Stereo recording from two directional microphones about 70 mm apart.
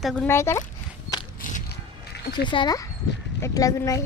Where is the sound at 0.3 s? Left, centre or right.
Left.